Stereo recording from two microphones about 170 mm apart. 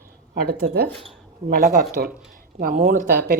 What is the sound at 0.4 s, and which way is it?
Speech, 60° right (ahead or behind).